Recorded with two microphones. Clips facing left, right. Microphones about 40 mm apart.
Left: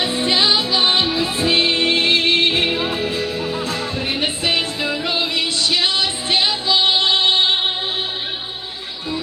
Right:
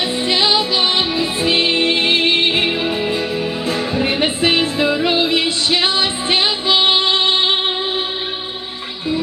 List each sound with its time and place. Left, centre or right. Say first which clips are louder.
0.3 s music: right 2 dB; centre
0.6 s music: right 1 dB; right
0.9 s music: right 1 dB; centre
1.4 s music: right 1 dB; right
3.0 s music: right 3 dB; right